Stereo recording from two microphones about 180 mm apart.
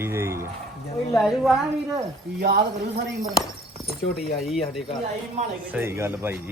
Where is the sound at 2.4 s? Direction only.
55° right (ahead or behind).